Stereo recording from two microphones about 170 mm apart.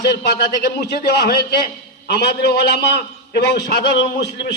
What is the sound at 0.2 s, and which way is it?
A man's voice, 70° left (ahead or behind).